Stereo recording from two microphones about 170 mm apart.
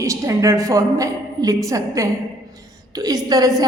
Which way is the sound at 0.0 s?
20° right (ahead or behind).